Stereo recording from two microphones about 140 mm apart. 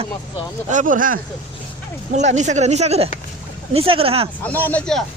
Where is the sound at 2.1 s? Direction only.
55° right (ahead or behind).